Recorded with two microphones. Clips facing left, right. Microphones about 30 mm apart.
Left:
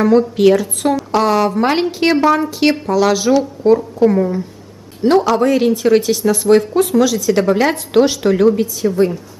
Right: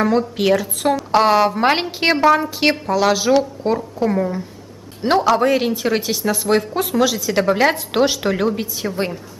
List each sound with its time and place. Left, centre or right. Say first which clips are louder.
0.0 s a woman's voice: left 6 dB; centre
1.1 s speech: right 1 dB; centre
2.1 s a woman's voice: left 1 dB; centre